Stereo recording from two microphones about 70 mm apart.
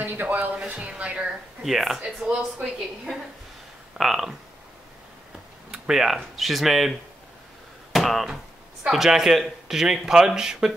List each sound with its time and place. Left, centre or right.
0.0 s speech: right
1.6 s speech: centre
5.7 s a sound: centre
6.1 s speech: centre